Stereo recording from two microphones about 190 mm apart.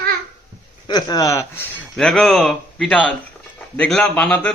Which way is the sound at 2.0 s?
5° left (ahead or behind).